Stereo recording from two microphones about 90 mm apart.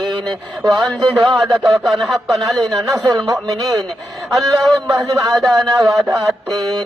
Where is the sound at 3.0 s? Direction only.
55° right (ahead or behind).